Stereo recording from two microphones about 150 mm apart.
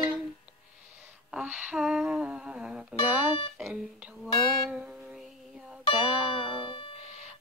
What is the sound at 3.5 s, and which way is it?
Music, centre (ahead or behind).